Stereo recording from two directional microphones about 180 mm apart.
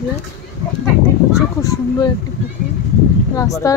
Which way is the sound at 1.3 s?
20° left (ahead or behind).